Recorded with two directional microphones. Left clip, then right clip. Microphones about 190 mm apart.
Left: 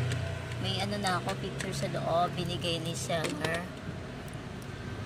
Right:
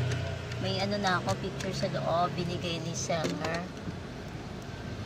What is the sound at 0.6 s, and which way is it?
Speech, 10° left (ahead or behind).